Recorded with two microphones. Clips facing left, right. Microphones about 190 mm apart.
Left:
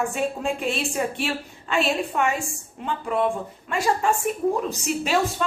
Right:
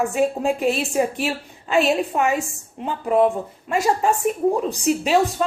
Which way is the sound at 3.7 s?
40° right (ahead or behind).